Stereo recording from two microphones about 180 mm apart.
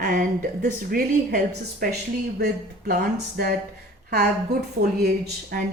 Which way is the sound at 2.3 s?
65° right (ahead or behind).